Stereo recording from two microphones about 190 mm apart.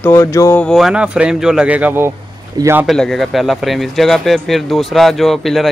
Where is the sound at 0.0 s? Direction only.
15° left (ahead or behind); by 2.9 s 15° right (ahead or behind).